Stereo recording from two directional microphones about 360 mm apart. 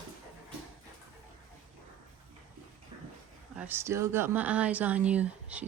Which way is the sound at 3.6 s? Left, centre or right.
Centre.